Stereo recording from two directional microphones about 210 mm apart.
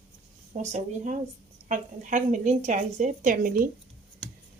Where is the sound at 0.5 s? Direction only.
35° right (ahead or behind).